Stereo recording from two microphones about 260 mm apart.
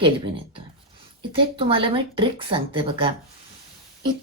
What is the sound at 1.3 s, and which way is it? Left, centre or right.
A woman's voice, centre.